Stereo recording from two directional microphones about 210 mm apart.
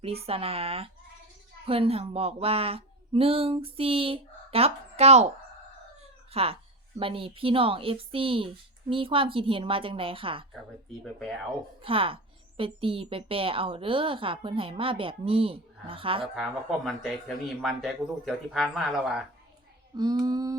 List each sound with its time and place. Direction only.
0.0 s a woman's voice: 30° right (ahead or behind)
6.0 s chicken: 30° right (ahead or behind)
7.0 s a woman's voice: 25° right (ahead or behind)
11.8 s a woman's voice: 25° right (ahead or behind)
16.3 s speech: centre (ahead or behind)
20.0 s a woman's voice: 20° right (ahead or behind)